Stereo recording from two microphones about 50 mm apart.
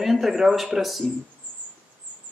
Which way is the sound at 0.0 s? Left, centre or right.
Centre.